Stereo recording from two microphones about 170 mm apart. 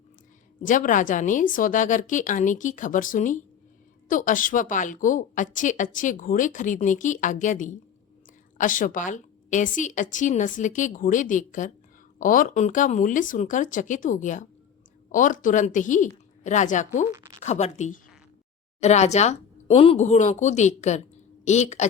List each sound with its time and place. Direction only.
0.6 s a woman's voice: 50° left (ahead or behind)
17.1 s speech: 20° right (ahead or behind)
17.4 s a woman's voice: 40° left (ahead or behind)